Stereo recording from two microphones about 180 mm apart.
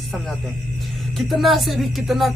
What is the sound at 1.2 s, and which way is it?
A woman's voice, centre (ahead or behind).